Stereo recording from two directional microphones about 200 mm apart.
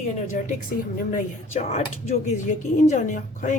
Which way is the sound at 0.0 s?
40° left (ahead or behind).